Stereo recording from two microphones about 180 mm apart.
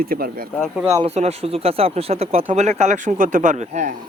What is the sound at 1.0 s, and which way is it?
Speech, 35° right (ahead or behind).